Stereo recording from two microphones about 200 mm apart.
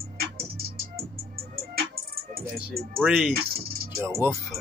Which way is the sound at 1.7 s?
50° right (ahead or behind).